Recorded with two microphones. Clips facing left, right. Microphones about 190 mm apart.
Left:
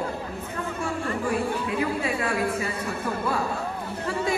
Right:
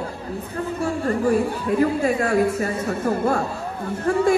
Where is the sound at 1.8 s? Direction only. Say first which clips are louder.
Right 9 dB; 45° right (ahead or behind).